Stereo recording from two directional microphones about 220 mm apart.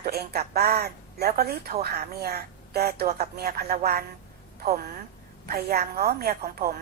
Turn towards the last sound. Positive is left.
turn(degrees=-45)  # may be behind; listen again after turning